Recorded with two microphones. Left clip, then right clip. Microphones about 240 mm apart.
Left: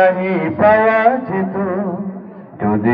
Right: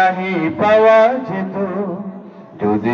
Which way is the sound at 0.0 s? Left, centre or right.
Right.